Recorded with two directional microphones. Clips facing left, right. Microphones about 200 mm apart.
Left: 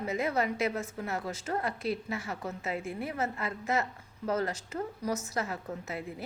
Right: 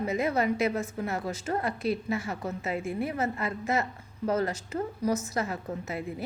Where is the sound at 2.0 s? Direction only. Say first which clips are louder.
Right 6 dB; 25° right (ahead or behind).